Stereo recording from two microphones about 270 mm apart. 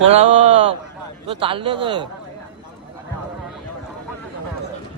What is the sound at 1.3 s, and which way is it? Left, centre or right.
Speech, centre.